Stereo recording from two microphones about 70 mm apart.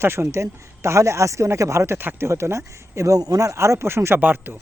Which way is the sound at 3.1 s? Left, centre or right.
Right.